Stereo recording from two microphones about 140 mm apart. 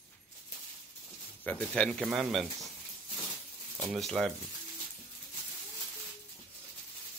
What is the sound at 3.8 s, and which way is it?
Speech, centre (ahead or behind).